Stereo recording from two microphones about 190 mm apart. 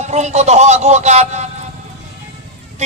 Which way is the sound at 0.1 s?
35° right (ahead or behind).